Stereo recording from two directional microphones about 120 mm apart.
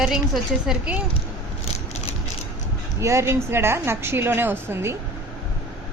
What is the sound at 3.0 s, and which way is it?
A woman's voice, 25° right (ahead or behind).